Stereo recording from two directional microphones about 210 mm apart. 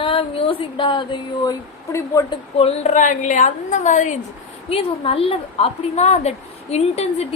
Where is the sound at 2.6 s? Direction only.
30° left (ahead or behind).